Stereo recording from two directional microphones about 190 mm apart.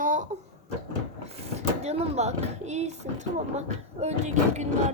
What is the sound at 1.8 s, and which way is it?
Speech, 35° right (ahead or behind).